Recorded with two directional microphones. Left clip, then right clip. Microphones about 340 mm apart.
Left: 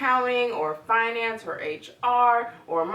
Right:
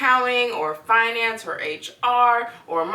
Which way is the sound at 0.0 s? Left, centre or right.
Centre.